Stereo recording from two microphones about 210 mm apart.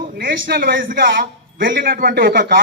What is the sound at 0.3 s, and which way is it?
A man's voice, 45° right (ahead or behind).